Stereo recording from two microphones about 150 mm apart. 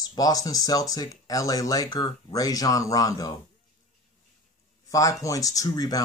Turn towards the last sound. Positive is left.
turn(degrees=25)  # may be behind; listen again after turning